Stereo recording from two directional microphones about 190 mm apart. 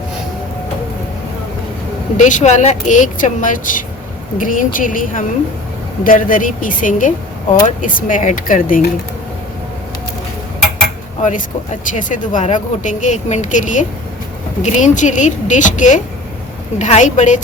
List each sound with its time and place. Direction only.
2.1 s speech: 40° left (ahead or behind)
11.2 s speech: 45° left (ahead or behind)